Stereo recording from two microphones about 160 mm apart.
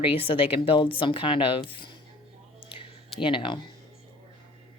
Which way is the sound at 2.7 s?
35° left (ahead or behind).